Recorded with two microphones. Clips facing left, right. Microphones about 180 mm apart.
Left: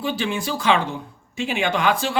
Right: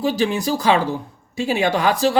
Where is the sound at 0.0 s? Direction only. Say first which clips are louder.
Right 5 dB; 40° right (ahead or behind).